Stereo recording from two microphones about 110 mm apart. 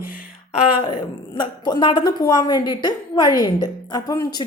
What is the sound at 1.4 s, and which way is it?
A woman's voice, 45° left (ahead or behind).